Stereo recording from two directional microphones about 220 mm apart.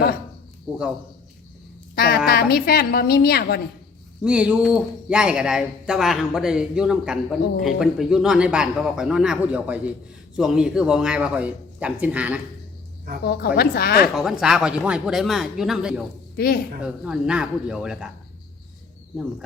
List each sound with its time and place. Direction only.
2.0 s a woman's voice: 45° left (ahead or behind)
4.2 s speech: 5° right (ahead or behind)
13.2 s a woman's voice: 45° left (ahead or behind)
14.2 s speech: centre (ahead or behind)